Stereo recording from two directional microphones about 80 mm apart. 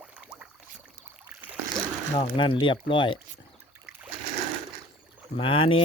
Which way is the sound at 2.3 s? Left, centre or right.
Left.